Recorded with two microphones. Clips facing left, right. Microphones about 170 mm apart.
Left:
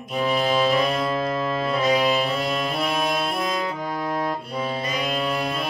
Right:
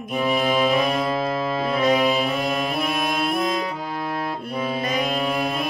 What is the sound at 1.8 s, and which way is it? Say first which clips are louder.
Music: right 2 dB; 50° right (ahead or behind).